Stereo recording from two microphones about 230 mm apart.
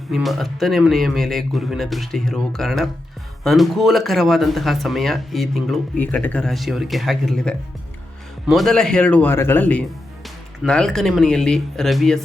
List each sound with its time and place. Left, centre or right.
0.1 s speech: centre